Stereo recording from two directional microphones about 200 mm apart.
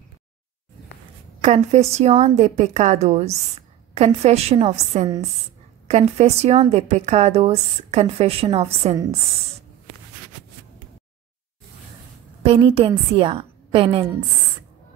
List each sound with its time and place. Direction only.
1.4 s a woman's voice: 35° right (ahead or behind)
12.4 s a woman's voice: 25° right (ahead or behind)